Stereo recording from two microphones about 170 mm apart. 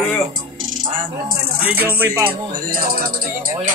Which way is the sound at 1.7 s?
10° right (ahead or behind).